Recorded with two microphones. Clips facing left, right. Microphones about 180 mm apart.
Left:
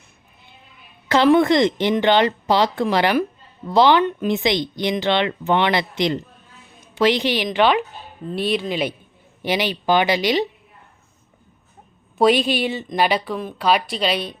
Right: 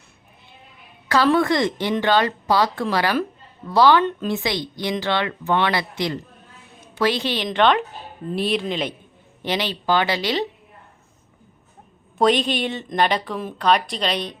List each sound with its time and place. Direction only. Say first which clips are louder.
1.0 s a woman's voice: left 3 dB; 20° left (ahead or behind)
12.1 s a woman's voice: left 2 dB; 5° left (ahead or behind)